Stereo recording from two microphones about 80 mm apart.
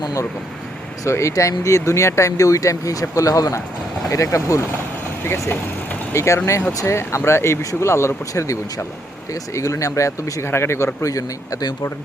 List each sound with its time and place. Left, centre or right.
0.0 s speech: left
11.0 s speech: left